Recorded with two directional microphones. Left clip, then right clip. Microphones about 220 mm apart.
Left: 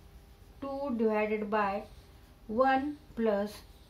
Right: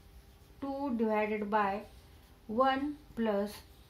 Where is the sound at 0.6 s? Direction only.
25° right (ahead or behind).